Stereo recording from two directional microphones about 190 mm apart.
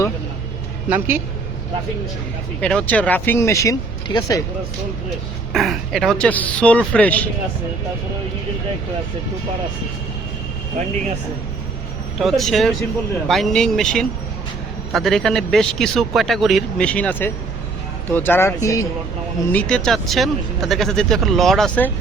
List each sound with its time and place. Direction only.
0.9 s speech: 10° right (ahead or behind)
2.6 s speech: 5° left (ahead or behind)
5.5 s speech: centre (ahead or behind)
12.2 s speech: centre (ahead or behind)